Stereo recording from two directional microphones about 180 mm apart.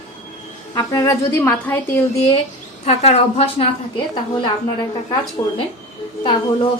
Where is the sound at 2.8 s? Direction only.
35° left (ahead or behind).